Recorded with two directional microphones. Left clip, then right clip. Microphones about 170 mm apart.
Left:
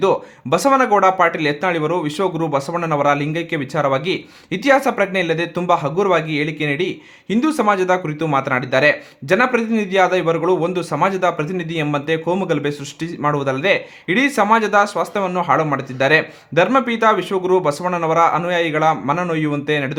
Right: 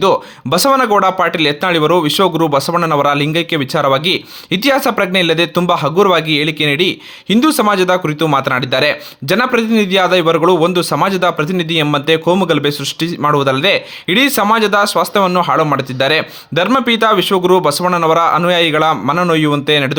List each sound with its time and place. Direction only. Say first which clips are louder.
0.0 s speech: right 5 dB; 25° right (ahead or behind)